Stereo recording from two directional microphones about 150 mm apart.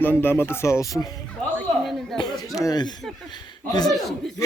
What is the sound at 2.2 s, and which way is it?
Speech, 25° left (ahead or behind).